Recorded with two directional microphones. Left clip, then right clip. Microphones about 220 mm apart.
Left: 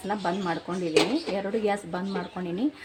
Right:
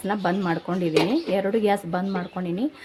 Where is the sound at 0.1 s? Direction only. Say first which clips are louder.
Right 3 dB; 25° right (ahead or behind).